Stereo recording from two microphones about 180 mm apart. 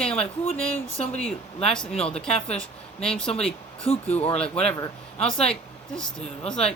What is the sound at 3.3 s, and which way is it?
Speech, 30° left (ahead or behind).